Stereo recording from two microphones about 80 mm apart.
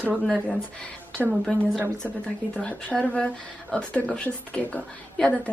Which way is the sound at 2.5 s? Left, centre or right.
Centre.